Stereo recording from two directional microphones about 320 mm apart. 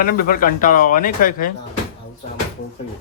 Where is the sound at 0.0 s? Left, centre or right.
Left.